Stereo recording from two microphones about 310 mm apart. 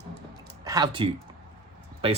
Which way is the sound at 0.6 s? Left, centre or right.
Centre.